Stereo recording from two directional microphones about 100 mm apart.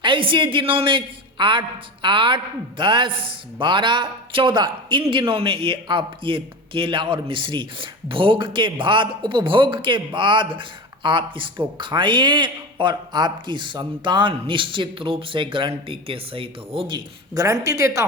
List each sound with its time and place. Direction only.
0.0 s a man's voice: 60° right (ahead or behind)
17.3 s a man's voice: 35° right (ahead or behind)